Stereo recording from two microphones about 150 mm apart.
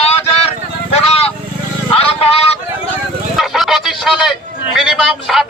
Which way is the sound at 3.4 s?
Centre (ahead or behind).